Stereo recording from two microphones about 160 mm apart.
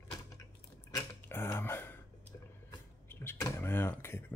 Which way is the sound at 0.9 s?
15° left (ahead or behind).